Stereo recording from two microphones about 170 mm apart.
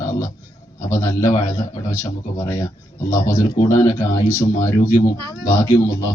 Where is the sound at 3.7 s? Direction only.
15° left (ahead or behind).